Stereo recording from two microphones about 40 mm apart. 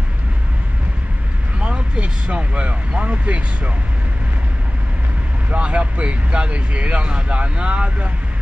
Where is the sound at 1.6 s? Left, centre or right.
Right.